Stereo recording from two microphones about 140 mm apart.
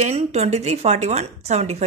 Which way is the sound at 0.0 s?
50° right (ahead or behind).